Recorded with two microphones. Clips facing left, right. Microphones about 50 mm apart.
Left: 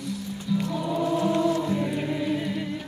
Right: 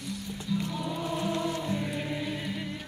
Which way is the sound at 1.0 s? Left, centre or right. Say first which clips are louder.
Left 8 dB; left.